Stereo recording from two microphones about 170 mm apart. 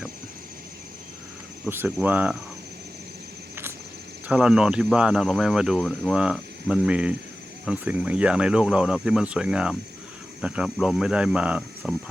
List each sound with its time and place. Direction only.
1.7 s cricket: 10° right (ahead or behind)
4.3 s speech: 5° right (ahead or behind)